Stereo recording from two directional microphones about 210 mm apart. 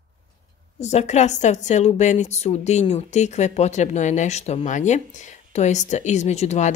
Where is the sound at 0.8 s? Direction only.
30° left (ahead or behind).